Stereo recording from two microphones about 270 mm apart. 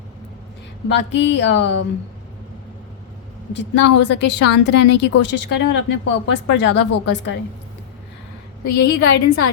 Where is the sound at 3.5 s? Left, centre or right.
Left.